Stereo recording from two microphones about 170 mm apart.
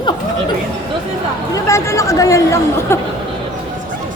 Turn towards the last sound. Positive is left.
turn(degrees=15)  # may be behind; listen again after turning